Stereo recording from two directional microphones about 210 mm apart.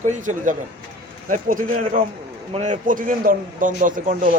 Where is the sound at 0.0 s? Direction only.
35° right (ahead or behind).